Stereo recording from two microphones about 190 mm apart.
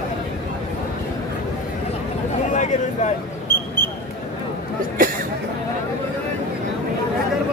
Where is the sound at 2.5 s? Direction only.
40° left (ahead or behind).